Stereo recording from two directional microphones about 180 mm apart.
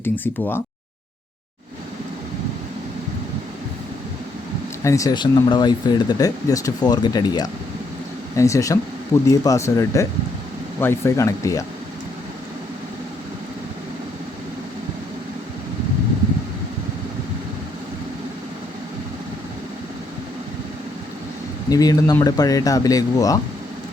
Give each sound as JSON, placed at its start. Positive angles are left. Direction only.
{"t": 0.0, "sound": "speech", "side_deg": 10}
{"t": 4.8, "sound": "speech", "side_deg": 15}
{"t": 21.7, "sound": "speech", "side_deg": 20}